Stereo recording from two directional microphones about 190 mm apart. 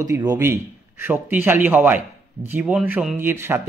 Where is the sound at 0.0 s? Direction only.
15° right (ahead or behind).